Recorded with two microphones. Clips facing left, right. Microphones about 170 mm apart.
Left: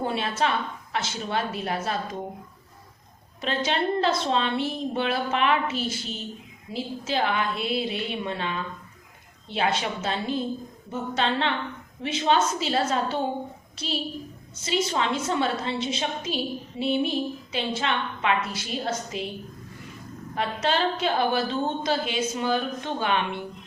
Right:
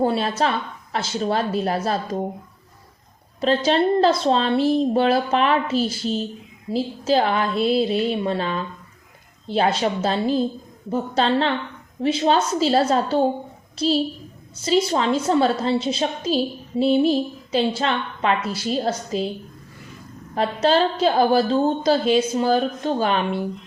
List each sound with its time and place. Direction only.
0.0 s a woman's voice: 35° right (ahead or behind)
3.4 s a woman's voice: 35° right (ahead or behind)
20.3 s a woman's voice: 35° right (ahead or behind)